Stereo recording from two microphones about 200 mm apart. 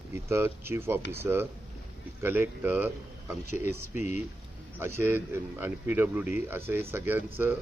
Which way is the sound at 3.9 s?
35° left (ahead or behind).